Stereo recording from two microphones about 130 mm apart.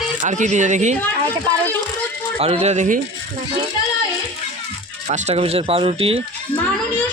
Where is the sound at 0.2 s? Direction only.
70° right (ahead or behind).